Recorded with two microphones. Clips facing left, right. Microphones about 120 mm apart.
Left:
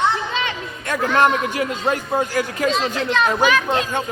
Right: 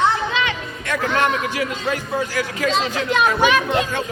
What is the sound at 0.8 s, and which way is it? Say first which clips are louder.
A man's voice: left 3 dB; 40° left (ahead or behind).